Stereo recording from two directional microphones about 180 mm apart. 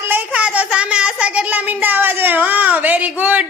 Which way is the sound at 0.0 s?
10° right (ahead or behind).